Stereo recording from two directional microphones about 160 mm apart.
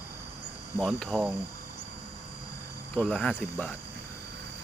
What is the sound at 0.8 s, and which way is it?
Speech, centre (ahead or behind).